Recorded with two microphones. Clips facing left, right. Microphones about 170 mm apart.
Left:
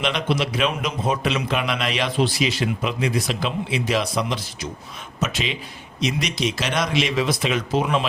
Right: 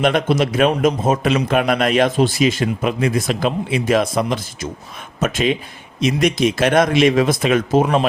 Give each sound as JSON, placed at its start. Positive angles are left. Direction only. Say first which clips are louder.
{"t": 0.0, "sound": "a man's voice", "louder": "right 7 dB", "side_deg": -50}